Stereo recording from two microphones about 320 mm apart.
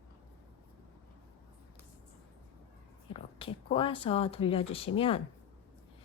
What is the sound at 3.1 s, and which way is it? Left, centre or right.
Speech, centre.